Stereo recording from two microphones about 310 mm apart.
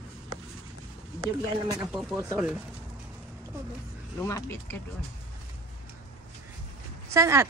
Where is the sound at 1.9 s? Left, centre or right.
Centre.